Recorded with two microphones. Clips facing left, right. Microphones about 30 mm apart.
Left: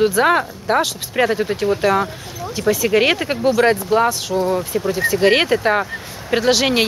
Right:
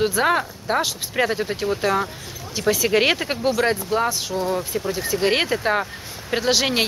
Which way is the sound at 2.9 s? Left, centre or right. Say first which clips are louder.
Left 3 dB; centre.